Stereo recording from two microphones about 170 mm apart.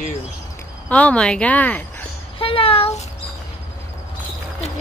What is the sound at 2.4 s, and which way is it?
Speech, 35° left (ahead or behind).